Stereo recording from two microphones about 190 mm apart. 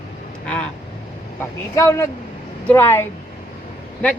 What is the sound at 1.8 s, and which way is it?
A woman's voice, 15° left (ahead or behind).